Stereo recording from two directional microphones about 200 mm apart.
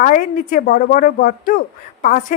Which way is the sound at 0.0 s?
40° left (ahead or behind).